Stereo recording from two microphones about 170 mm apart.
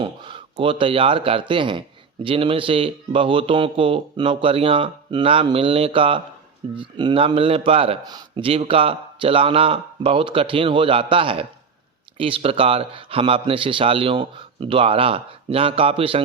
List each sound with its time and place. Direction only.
0.0 s speech: 30° right (ahead or behind)